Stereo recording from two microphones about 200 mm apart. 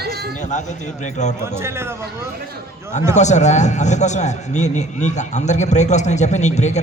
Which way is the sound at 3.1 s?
35° left (ahead or behind).